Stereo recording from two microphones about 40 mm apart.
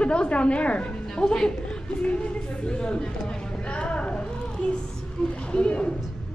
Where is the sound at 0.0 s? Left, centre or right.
Left.